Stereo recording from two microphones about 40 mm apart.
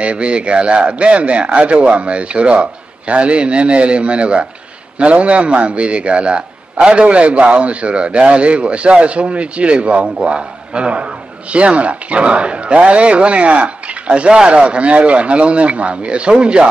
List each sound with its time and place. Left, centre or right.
0.0 s a man's voice: right